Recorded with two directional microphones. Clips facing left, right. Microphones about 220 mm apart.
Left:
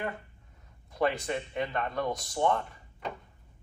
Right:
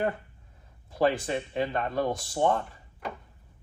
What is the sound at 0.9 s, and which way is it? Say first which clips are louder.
Speech: right 4 dB; 30° right (ahead or behind).